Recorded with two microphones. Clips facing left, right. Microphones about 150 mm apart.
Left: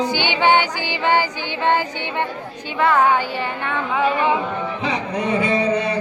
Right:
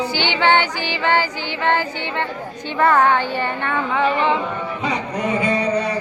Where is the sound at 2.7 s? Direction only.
5° left (ahead or behind).